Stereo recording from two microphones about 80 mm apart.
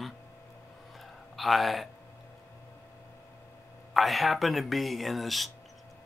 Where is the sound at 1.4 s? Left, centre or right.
Centre.